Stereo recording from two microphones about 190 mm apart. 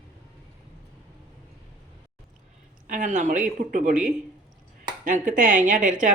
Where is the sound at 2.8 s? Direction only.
40° right (ahead or behind).